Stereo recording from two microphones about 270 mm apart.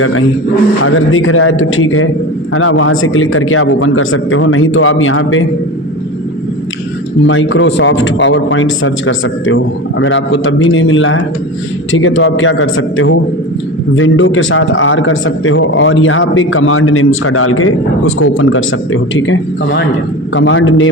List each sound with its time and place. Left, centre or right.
0.0 s a man's voice: left
7.3 s a man's voice: left